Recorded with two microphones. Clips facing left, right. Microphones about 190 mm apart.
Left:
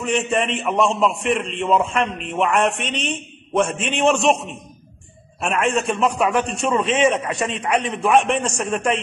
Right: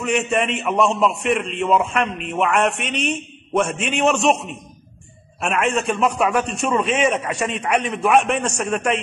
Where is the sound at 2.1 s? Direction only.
Centre (ahead or behind).